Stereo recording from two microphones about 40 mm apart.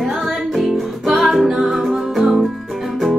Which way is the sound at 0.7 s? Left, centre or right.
Centre.